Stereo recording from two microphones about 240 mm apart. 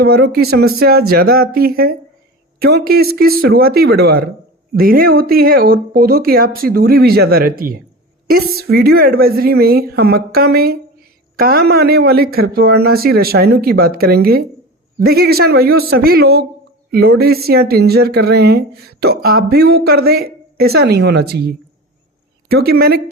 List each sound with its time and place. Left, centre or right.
0.0 s speech: right